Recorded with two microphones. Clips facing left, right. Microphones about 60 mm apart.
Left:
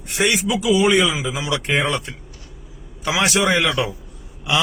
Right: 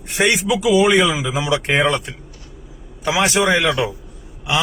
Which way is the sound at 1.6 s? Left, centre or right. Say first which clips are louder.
Right 2 dB; right.